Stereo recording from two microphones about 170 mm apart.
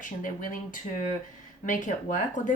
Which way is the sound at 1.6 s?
50° left (ahead or behind).